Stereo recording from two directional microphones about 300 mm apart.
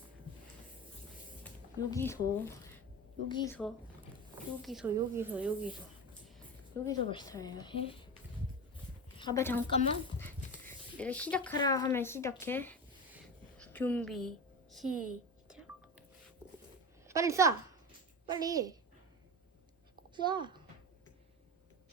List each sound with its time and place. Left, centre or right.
1.5 s speech: centre
6.8 s speech: centre
9.1 s a woman's voice: centre
15.4 s whispering: centre
17.1 s a woman's voice: centre
20.1 s speech: centre